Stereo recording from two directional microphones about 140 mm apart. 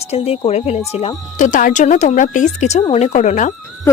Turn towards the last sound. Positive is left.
turn(degrees=60)  # may be behind; listen again after turning